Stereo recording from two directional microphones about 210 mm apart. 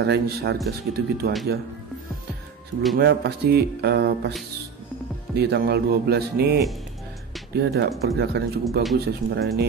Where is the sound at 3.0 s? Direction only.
55° right (ahead or behind).